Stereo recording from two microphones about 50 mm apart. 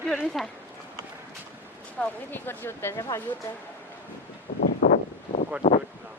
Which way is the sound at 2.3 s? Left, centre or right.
Left.